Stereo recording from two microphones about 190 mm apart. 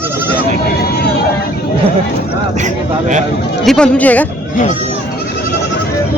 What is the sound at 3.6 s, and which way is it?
Speech, 5° left (ahead or behind).